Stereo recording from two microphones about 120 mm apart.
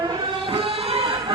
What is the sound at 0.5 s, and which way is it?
Music, 50° right (ahead or behind).